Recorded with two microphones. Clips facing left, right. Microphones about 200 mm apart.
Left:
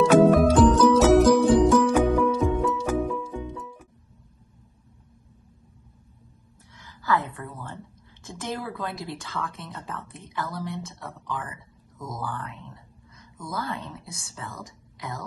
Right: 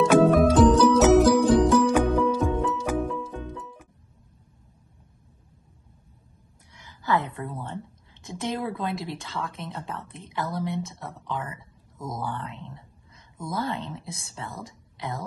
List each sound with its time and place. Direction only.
0.1 s music: centre (ahead or behind)
6.7 s a woman's voice: 20° right (ahead or behind)